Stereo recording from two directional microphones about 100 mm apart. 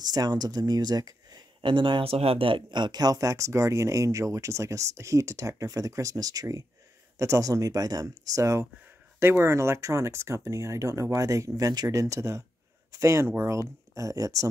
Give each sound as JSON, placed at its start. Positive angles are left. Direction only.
{"t": 0.0, "sound": "speech", "side_deg": -40}